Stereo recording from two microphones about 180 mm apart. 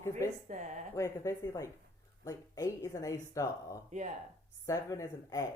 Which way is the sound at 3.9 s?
40° right (ahead or behind).